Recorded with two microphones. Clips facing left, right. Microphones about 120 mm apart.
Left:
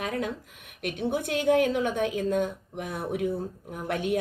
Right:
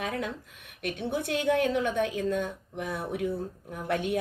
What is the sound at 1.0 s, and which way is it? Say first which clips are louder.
Speech: left 3 dB; 50° left (ahead or behind).